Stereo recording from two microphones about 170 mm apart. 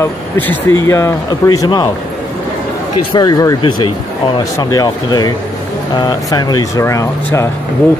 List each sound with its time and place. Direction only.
0.0 s speech: 15° left (ahead or behind)
3.1 s speech: 20° left (ahead or behind)